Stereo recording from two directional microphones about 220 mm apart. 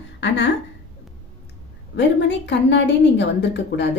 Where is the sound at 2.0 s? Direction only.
55° left (ahead or behind).